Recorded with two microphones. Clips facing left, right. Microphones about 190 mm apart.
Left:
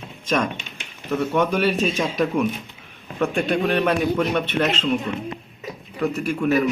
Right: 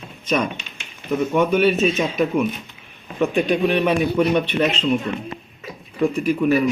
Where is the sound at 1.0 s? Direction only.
10° right (ahead or behind).